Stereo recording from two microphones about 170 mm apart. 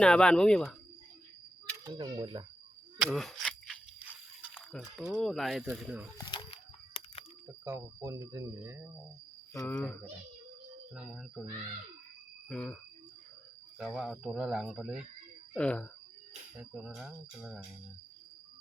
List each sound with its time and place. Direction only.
0.0 s speech: 5° left (ahead or behind)
1.8 s speech: 20° right (ahead or behind)
3.0 s a sound: centre (ahead or behind)
4.5 s speech: 5° left (ahead or behind)
6.1 s a sound: 25° left (ahead or behind)
7.6 s speech: 15° right (ahead or behind)
9.5 s speech: 15° left (ahead or behind)
10.9 s speech: 5° right (ahead or behind)
12.5 s speech: 5° left (ahead or behind)
15.5 s speech: 5° left (ahead or behind)
16.6 s speech: 5° right (ahead or behind)